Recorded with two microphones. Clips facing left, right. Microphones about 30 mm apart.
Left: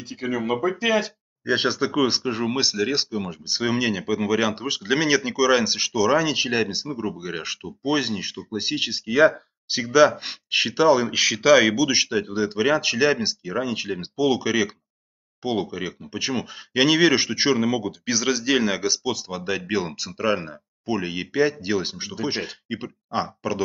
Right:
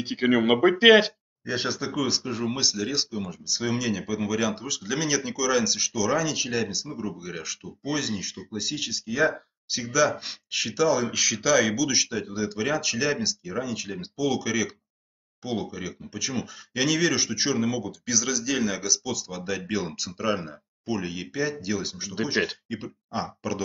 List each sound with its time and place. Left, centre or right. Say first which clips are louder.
0.0 s speech: right 5 dB; right
1.4 s speech: left 7 dB; left
19.8 s speech: left 4 dB; centre